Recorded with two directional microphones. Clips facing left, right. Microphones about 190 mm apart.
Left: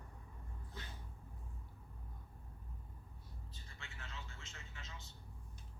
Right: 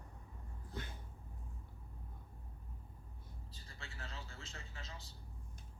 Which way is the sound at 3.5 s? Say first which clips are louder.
Right 4 dB; 35° right (ahead or behind).